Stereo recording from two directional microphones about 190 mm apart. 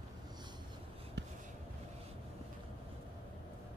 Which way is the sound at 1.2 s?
65° right (ahead or behind).